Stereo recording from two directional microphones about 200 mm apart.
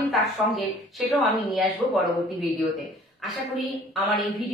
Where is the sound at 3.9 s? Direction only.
Centre (ahead or behind).